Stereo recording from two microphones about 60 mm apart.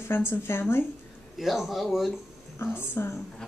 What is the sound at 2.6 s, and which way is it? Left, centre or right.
Speech, left.